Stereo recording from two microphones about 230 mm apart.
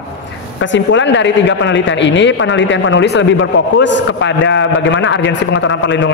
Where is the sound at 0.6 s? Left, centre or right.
Left.